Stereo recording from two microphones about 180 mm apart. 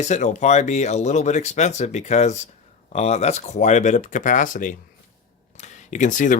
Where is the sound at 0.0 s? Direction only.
40° left (ahead or behind).